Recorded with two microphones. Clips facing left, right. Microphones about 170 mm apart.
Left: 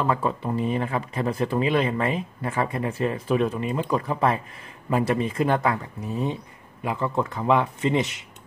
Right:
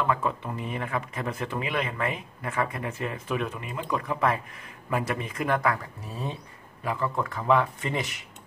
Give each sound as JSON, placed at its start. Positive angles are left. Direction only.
{"t": 0.0, "sound": "speech", "side_deg": 35}